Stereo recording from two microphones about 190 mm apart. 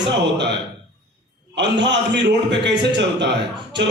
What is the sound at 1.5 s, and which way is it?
Speech, 70° right (ahead or behind).